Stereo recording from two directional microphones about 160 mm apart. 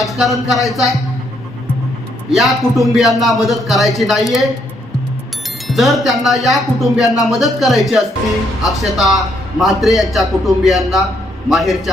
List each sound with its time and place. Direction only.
0.0 s a man's voice: centre (ahead or behind)
2.3 s a man's voice: centre (ahead or behind)
5.6 s a man's voice: centre (ahead or behind)